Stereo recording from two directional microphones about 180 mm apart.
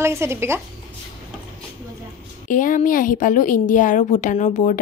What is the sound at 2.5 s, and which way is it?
A woman's voice, 50° left (ahead or behind).